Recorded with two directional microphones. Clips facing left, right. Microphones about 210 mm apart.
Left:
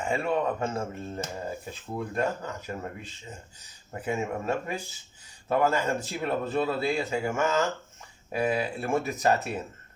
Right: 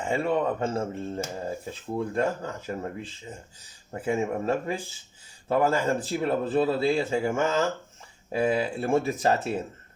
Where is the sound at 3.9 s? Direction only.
30° right (ahead or behind).